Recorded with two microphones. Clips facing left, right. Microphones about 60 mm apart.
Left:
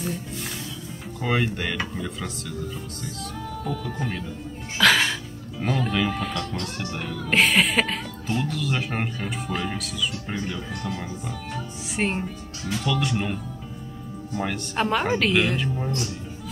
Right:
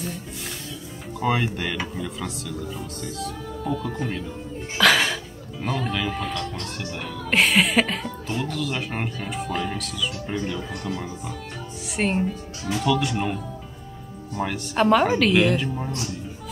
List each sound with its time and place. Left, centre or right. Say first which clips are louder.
1.2 s speech: right 1 dB; centre
4.7 s music: right 1 dB; centre
5.6 s speech: left 2 dB; centre